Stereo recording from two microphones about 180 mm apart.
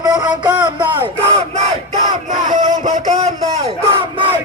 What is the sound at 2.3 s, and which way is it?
Speech, 45° right (ahead or behind).